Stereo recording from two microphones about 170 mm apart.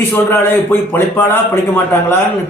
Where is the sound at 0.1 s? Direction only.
10° left (ahead or behind).